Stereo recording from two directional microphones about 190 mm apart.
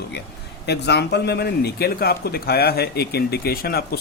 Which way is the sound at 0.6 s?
60° left (ahead or behind).